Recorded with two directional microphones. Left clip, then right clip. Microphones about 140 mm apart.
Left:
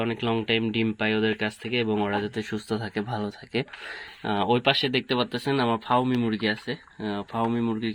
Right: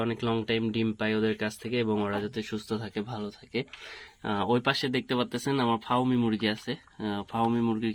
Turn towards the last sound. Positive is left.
turn(degrees=0)  # may be behind; listen again after turning